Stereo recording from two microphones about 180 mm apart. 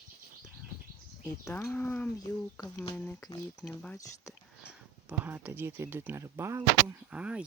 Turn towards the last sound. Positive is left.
turn(degrees=-5)  # may be behind; listen again after turning